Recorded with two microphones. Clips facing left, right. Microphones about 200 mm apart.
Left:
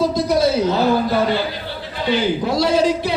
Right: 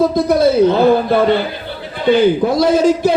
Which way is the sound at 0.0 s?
55° right (ahead or behind).